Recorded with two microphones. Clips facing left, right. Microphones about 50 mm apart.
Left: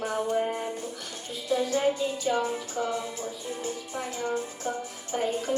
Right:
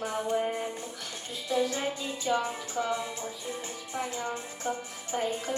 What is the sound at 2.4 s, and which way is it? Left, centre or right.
Music, right.